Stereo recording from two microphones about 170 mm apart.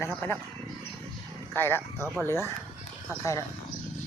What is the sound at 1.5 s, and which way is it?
Speech, 10° left (ahead or behind).